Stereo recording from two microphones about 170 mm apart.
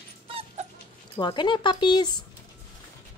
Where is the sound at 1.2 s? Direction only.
25° left (ahead or behind).